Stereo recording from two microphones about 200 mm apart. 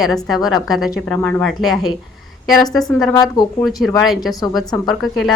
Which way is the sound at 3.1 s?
20° left (ahead or behind).